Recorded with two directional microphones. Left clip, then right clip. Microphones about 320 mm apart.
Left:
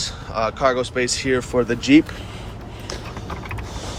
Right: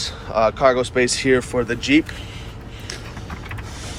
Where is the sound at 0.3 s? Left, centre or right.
Centre.